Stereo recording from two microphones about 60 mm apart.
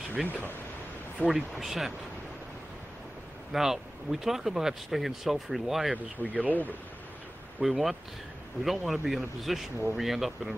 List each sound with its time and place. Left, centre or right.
0.2 s speech: centre
3.5 s speech: centre
6.2 s speech: right
7.6 s speech: centre